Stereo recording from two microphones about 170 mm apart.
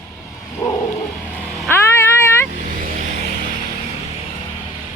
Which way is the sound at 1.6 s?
15° left (ahead or behind).